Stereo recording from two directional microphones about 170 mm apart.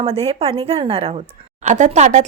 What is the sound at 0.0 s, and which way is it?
Speech, 35° right (ahead or behind).